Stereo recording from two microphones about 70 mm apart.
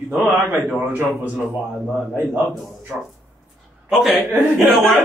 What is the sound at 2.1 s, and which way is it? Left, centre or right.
Speech, right.